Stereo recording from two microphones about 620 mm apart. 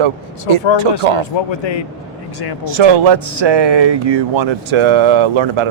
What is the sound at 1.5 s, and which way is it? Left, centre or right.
Speech, left.